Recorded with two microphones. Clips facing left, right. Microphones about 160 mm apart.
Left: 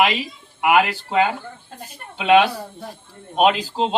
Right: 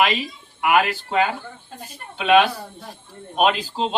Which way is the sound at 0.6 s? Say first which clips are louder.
Left 2 dB; 20° left (ahead or behind).